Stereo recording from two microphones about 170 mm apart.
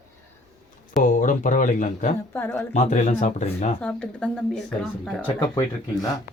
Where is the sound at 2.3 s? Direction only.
10° left (ahead or behind).